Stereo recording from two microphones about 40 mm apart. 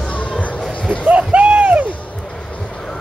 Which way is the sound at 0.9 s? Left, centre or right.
Right.